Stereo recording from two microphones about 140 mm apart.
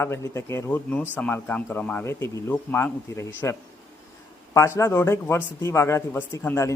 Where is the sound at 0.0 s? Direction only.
20° left (ahead or behind).